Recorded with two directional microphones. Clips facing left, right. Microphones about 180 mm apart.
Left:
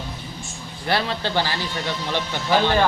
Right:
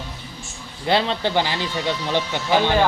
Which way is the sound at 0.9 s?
20° right (ahead or behind).